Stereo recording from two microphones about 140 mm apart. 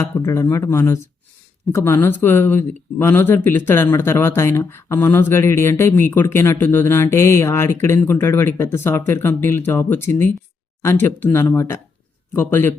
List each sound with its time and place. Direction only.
0.0 s speech: 20° left (ahead or behind)